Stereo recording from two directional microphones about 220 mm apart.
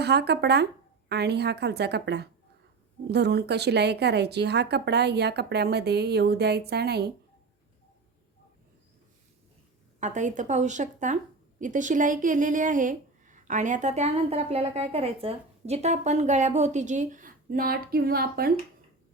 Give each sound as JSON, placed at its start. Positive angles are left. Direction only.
{"t": 0.0, "sound": "speech", "side_deg": -50}
{"t": 10.0, "sound": "speech", "side_deg": -35}